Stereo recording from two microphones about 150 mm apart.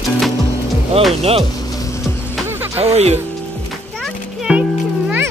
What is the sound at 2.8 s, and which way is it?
Speech, 45° right (ahead or behind).